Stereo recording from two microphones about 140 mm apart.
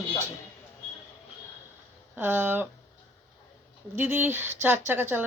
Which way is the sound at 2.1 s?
15° right (ahead or behind).